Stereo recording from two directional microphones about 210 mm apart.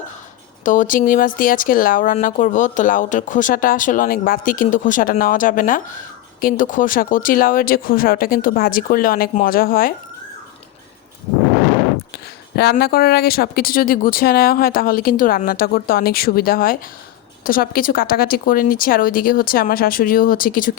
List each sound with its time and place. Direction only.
0.6 s speech: 40° left (ahead or behind)
12.1 s speech: 50° left (ahead or behind)